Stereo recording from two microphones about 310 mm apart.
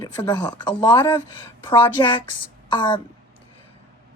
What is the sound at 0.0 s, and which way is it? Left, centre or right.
Speech, centre.